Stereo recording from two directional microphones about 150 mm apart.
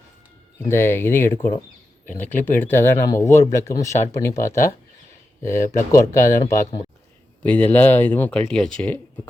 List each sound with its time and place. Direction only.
0.6 s speech: 15° left (ahead or behind)
7.4 s speech: 10° left (ahead or behind)